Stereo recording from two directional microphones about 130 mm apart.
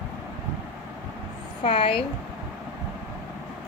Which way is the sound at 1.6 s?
45° left (ahead or behind).